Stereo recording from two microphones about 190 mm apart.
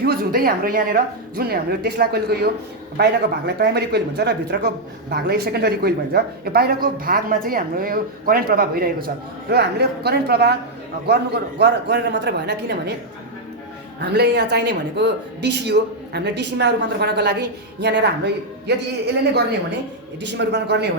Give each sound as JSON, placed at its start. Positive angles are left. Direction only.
{"t": 0.0, "sound": "speech", "side_deg": -50}
{"t": 14.0, "sound": "speech", "side_deg": -65}
{"t": 20.2, "sound": "speech", "side_deg": -65}